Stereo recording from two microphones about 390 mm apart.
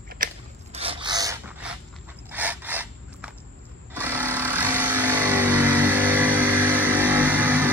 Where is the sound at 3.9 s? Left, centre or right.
Centre.